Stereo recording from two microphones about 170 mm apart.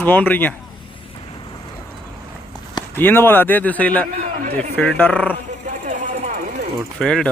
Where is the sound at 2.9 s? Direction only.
15° left (ahead or behind).